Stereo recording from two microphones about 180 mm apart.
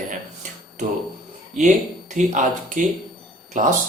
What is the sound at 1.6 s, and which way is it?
Speech, 40° right (ahead or behind).